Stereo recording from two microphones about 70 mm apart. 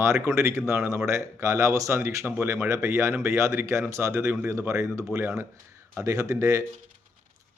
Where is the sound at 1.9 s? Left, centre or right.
Right.